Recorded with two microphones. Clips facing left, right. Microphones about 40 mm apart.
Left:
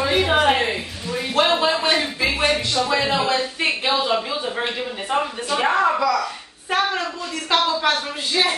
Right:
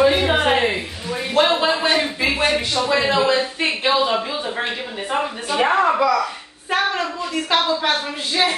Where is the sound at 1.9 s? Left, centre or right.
Centre.